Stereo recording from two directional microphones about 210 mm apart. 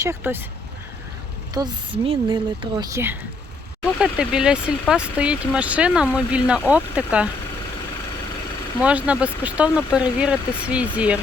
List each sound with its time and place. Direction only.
0.0 s speech: 10° right (ahead or behind)
1.5 s speech: 20° right (ahead or behind); by 7.3 s 5° right (ahead or behind)
8.8 s speech: 5° right (ahead or behind)